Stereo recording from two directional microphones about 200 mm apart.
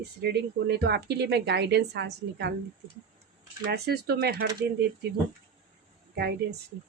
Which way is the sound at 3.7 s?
55° right (ahead or behind).